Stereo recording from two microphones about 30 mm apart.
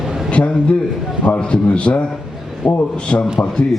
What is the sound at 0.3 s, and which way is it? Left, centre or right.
A man's voice, left.